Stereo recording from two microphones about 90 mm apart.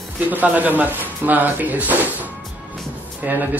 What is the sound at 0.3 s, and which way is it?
Speech, 15° right (ahead or behind).